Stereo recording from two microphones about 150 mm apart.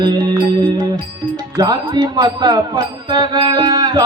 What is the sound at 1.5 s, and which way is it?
Music, 25° right (ahead or behind).